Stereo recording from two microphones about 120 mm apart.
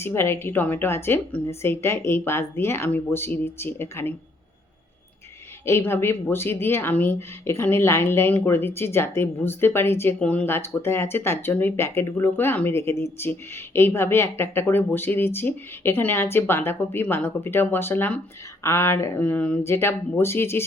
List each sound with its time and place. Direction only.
0.0 s speech: 20° left (ahead or behind)
5.6 s speech: 20° left (ahead or behind)